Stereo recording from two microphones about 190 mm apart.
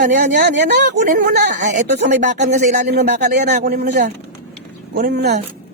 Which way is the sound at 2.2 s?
40° right (ahead or behind).